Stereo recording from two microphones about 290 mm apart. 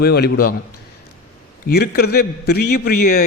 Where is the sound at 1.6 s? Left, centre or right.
Left.